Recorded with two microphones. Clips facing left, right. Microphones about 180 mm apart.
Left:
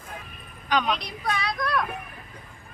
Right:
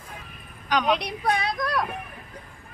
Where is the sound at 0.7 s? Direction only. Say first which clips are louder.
Right 1 dB; 10° right (ahead or behind).